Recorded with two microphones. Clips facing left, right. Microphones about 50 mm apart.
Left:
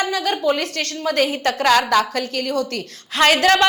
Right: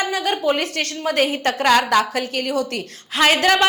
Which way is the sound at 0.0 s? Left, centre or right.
Centre.